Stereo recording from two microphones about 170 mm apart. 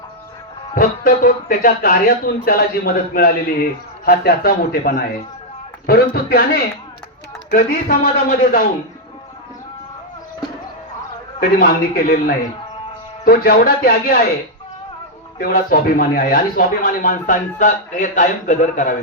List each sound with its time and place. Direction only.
0.8 s speech: 55° left (ahead or behind)
11.3 s speech: 60° left (ahead or behind)
13.2 s speech: 60° left (ahead or behind)
15.4 s speech: 60° left (ahead or behind)